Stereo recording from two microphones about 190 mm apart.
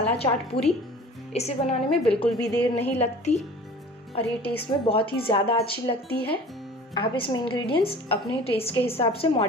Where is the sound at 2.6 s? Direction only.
10° left (ahead or behind).